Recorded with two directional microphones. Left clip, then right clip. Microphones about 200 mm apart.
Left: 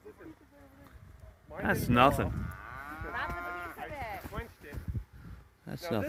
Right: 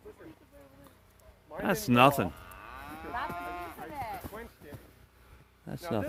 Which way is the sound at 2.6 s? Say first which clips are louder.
Even; 65° right (ahead or behind).